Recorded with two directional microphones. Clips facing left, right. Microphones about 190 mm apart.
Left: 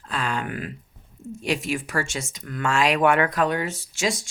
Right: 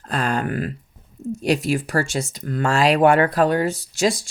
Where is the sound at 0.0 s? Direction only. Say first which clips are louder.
Right 5 dB; 40° right (ahead or behind).